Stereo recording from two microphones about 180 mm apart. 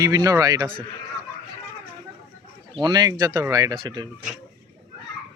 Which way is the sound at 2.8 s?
25° right (ahead or behind).